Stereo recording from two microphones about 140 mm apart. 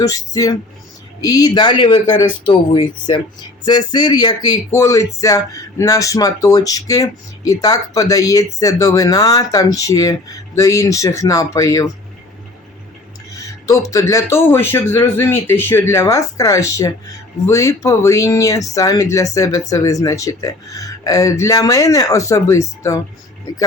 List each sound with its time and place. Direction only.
0.0 s speech: 25° left (ahead or behind)
13.3 s speech: 25° left (ahead or behind)